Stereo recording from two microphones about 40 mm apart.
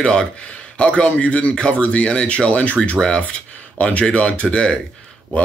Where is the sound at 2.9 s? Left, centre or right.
Left.